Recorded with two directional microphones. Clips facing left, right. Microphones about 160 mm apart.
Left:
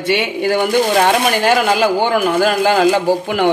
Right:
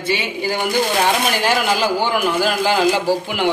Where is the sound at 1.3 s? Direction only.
50° left (ahead or behind).